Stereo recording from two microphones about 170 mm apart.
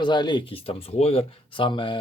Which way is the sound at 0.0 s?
25° left (ahead or behind).